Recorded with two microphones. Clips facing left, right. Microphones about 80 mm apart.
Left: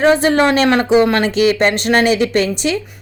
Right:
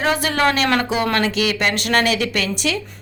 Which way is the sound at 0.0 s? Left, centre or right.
Left.